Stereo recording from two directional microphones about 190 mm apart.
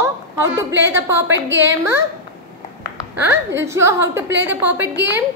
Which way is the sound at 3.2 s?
10° right (ahead or behind).